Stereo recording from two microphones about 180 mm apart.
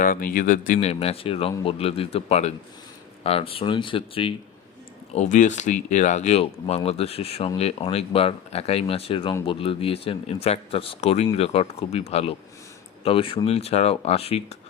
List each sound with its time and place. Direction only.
0.0 s speech: 50° left (ahead or behind)
0.7 s speech: 35° left (ahead or behind)
5.1 s speech: 45° left (ahead or behind)